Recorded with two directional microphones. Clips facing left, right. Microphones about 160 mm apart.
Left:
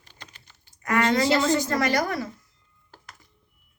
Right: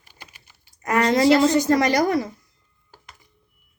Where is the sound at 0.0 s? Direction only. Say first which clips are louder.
Right 1 dB; 10° right (ahead or behind).